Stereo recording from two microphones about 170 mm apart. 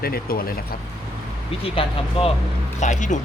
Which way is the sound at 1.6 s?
35° left (ahead or behind).